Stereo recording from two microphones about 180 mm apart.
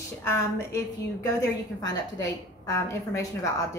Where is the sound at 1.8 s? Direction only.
20° left (ahead or behind).